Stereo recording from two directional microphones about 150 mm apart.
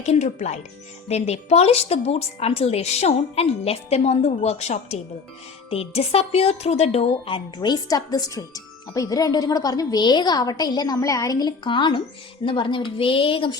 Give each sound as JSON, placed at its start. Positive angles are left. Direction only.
{"t": 0.0, "sound": "a woman's voice", "side_deg": 50}